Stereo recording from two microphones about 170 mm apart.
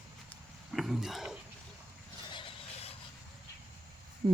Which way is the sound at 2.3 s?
30° left (ahead or behind).